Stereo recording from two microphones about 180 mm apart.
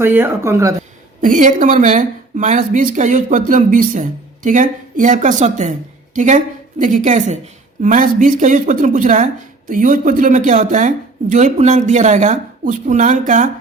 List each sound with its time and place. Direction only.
0.0 s speech: 10° right (ahead or behind)
1.2 s a woman's voice: 45° right (ahead or behind)